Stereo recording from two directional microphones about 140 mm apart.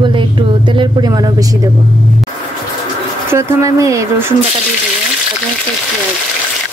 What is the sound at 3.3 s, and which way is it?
Speech, 20° right (ahead or behind).